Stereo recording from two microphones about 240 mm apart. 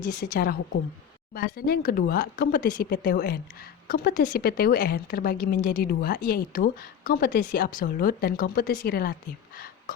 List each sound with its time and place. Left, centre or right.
0.1 s a woman's voice: left